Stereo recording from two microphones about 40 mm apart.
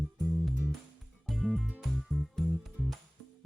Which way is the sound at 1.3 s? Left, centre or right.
Centre.